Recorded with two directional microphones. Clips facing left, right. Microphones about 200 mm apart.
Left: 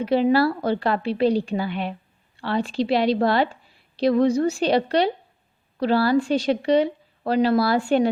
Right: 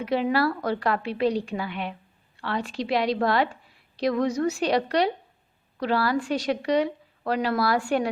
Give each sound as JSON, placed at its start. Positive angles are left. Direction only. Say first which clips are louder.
{"t": 0.0, "sound": "a woman's voice", "louder": "left 5 dB", "side_deg": 30}